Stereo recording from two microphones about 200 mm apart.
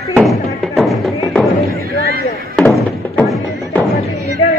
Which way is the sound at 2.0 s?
50° right (ahead or behind).